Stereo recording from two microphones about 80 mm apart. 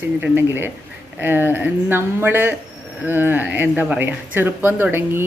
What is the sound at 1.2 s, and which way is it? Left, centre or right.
Speech, right.